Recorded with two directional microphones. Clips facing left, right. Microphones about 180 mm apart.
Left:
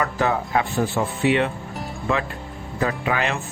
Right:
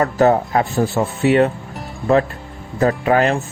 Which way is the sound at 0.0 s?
40° right (ahead or behind).